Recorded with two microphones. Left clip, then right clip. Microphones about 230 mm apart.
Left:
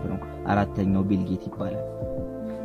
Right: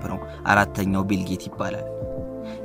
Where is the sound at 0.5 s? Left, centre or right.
Right.